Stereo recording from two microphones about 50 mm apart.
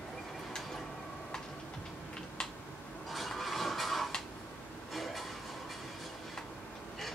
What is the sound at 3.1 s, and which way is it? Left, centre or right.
Rub, centre.